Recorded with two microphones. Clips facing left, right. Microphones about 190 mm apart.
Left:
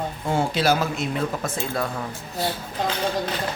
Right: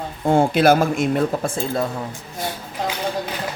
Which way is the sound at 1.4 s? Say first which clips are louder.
Right 4 dB; 25° right (ahead or behind).